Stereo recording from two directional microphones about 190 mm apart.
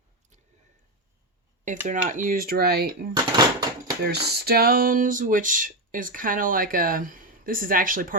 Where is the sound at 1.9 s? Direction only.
45° right (ahead or behind).